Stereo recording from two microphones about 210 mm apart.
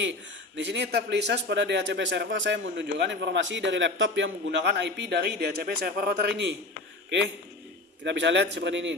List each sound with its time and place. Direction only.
0.0 s a man's voice: 60° right (ahead or behind)
8.0 s a man's voice: 60° right (ahead or behind)